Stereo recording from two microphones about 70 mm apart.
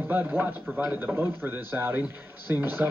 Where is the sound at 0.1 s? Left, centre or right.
Right.